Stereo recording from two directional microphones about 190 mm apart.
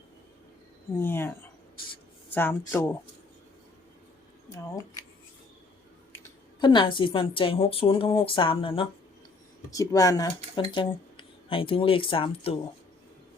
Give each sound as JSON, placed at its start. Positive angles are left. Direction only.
{"t": 0.9, "sound": "speech", "side_deg": 10}
{"t": 6.1, "sound": "speech", "side_deg": 20}
{"t": 9.6, "sound": "speech", "side_deg": 15}